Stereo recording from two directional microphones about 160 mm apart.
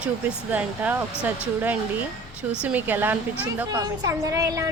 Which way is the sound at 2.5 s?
5° right (ahead or behind).